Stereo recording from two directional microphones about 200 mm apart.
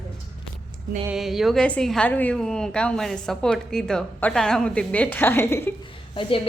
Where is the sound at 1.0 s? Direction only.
Centre (ahead or behind).